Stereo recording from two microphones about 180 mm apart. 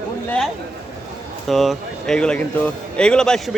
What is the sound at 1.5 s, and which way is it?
A man's voice, centre (ahead or behind).